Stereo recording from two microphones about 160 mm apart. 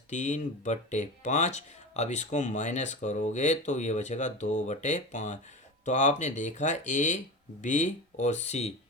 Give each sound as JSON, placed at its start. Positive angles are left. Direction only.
{"t": 0.1, "sound": "speech", "side_deg": 50}